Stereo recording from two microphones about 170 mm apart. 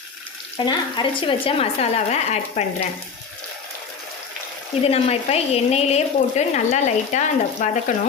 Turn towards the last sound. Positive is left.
turn(degrees=45)  # may be behind; listen again after turning